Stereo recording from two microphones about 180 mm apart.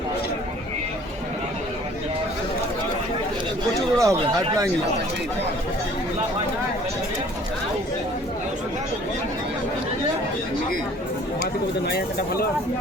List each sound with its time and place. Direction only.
3.9 s speech: 15° right (ahead or behind)